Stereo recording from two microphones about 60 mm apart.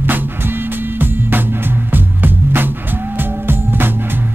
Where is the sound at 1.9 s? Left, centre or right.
Right.